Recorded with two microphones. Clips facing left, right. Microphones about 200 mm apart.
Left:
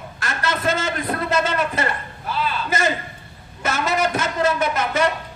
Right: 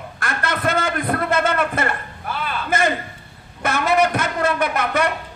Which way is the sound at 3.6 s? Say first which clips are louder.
Right 3 dB; 55° right (ahead or behind).